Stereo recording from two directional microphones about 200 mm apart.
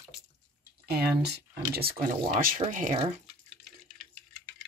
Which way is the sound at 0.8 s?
50° right (ahead or behind).